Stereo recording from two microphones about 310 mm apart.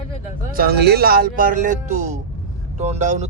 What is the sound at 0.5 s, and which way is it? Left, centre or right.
Speech, right.